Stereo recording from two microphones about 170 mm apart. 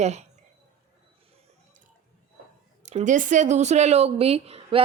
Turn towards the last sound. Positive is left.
turn(degrees=-35)  # may be behind; listen again after turning